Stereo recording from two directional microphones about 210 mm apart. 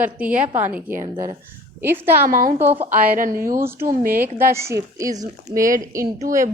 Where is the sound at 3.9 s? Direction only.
40° right (ahead or behind).